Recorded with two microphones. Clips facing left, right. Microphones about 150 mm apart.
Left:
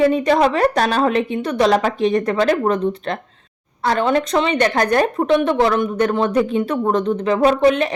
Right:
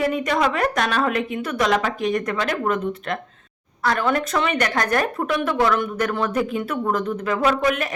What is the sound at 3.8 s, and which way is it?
A woman's voice, 25° left (ahead or behind).